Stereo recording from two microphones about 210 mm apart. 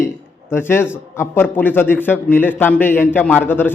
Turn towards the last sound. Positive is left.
turn(degrees=10)  # may be behind; listen again after turning